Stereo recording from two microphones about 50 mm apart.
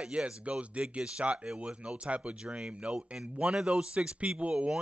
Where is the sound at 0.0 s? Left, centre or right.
Right.